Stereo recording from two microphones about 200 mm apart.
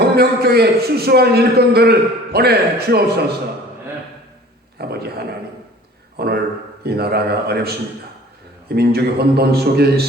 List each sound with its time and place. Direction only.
0.0 s a man's voice: 50° right (ahead or behind)
4.8 s a man's voice: 50° right (ahead or behind)